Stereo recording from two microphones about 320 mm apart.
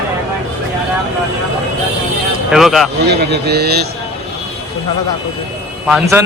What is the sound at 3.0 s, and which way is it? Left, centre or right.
Speech, right.